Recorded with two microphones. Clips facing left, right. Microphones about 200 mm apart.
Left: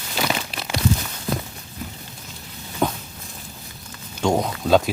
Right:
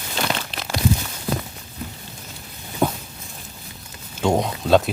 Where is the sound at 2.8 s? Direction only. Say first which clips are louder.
Right 1 dB; 10° right (ahead or behind).